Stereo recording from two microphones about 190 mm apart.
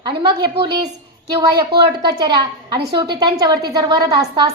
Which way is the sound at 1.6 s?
20° right (ahead or behind).